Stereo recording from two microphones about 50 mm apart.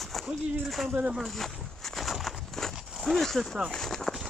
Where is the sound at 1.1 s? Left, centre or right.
Centre.